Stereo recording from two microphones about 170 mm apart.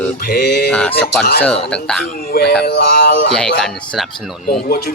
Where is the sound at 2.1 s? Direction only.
60° left (ahead or behind).